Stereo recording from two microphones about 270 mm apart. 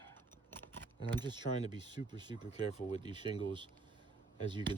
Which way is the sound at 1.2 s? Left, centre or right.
Centre.